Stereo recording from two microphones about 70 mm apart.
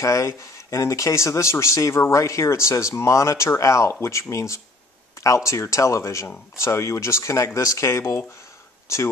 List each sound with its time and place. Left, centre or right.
0.0 s speech: left